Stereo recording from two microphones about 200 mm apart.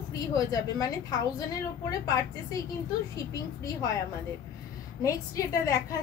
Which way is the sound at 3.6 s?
15° left (ahead or behind).